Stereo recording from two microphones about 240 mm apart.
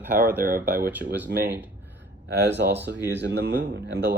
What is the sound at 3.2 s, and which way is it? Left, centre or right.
Speech, right.